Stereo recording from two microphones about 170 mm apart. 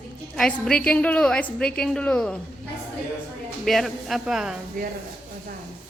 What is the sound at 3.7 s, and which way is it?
Speech, centre (ahead or behind).